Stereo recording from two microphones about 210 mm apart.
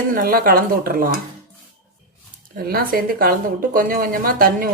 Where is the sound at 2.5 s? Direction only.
45° right (ahead or behind).